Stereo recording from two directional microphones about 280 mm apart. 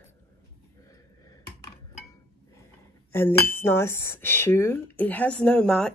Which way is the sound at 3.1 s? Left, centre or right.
Centre.